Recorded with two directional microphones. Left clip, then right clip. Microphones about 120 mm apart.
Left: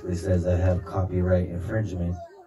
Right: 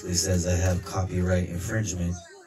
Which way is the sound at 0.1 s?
35° right (ahead or behind).